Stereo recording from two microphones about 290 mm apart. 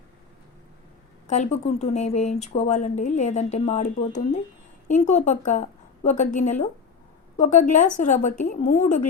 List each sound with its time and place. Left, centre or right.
1.3 s speech: left